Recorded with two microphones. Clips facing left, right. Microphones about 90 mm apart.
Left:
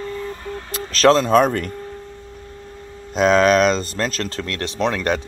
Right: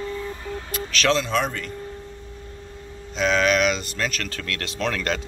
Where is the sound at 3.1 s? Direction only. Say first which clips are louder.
Left 6 dB; 45° left (ahead or behind); by 5.1 s 20° left (ahead or behind).